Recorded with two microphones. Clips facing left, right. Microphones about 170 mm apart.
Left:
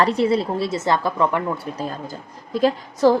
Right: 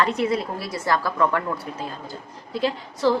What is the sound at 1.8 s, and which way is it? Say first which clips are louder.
A woman's voice: left 4 dB; 45° left (ahead or behind).